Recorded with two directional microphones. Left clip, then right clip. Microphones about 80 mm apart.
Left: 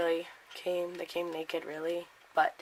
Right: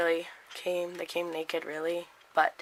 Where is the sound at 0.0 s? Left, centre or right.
Right.